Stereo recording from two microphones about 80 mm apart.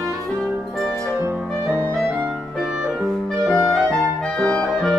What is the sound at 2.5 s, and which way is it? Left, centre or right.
Music, centre.